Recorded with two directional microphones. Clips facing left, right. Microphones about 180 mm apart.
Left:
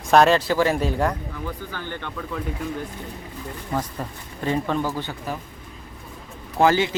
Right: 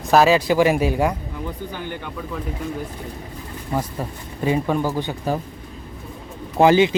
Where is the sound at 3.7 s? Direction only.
10° right (ahead or behind).